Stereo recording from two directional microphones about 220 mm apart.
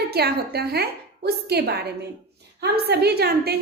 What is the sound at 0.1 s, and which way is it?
A woman's voice, 45° right (ahead or behind).